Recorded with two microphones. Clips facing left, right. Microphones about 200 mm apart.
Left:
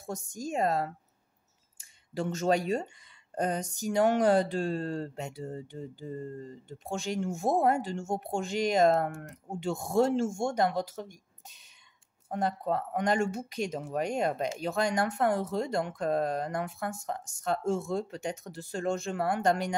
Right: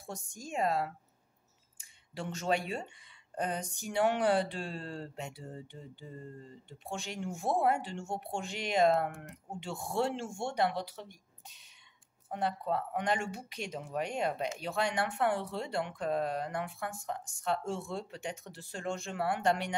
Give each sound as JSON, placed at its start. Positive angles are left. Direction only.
{"t": 0.0, "sound": "speech", "side_deg": 40}